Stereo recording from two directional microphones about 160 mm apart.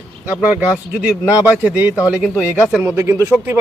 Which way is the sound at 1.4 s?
10° right (ahead or behind).